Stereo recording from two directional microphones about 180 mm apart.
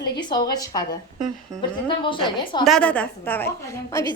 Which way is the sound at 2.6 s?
5° left (ahead or behind).